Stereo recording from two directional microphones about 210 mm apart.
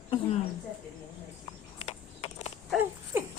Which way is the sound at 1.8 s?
30° left (ahead or behind).